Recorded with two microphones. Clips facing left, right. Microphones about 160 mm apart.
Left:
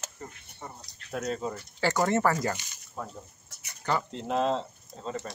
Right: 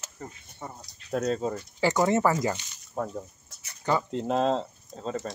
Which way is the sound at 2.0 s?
20° right (ahead or behind).